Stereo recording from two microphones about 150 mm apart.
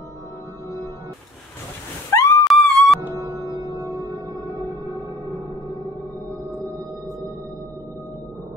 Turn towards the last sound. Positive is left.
turn(degrees=-20)  # may be behind; listen again after turning